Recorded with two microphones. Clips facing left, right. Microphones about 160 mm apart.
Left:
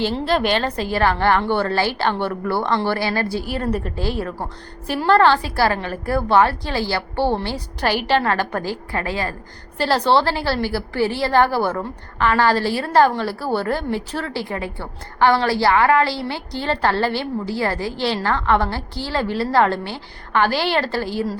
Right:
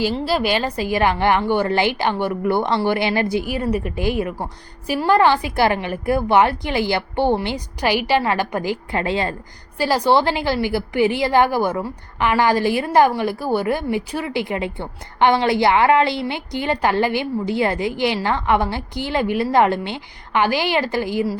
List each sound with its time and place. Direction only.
0.0 s a woman's voice: 5° right (ahead or behind); by 9.3 s 25° right (ahead or behind)
9.7 s a woman's voice: 10° right (ahead or behind)